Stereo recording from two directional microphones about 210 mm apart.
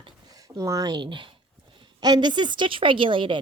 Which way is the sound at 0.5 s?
15° right (ahead or behind).